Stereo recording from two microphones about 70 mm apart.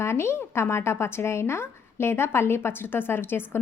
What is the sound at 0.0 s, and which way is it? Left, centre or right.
A woman's voice, left.